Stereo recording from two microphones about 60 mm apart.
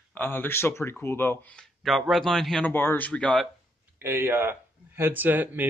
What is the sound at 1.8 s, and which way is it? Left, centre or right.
Speech, centre.